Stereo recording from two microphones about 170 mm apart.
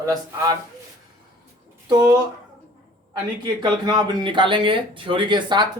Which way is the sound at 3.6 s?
25° right (ahead or behind).